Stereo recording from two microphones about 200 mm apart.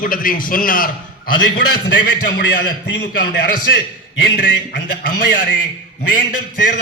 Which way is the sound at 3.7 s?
65° left (ahead or behind).